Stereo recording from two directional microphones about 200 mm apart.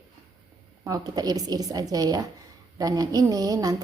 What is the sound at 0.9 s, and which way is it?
Speech, 20° right (ahead or behind).